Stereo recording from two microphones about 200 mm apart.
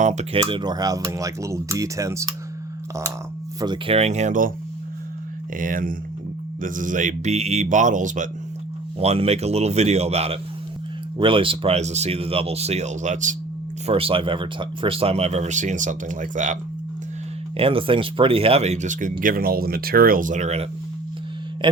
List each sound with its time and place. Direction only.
0.0 s speech: 35° right (ahead or behind); by 2.3 s 15° right (ahead or behind)
3.6 s speech: 25° right (ahead or behind); by 4.5 s 40° right (ahead or behind)
5.5 s speech: 40° right (ahead or behind)
13.8 s speech: 30° right (ahead or behind)
17.6 s speech: 25° right (ahead or behind)
21.6 s speech: 20° right (ahead or behind)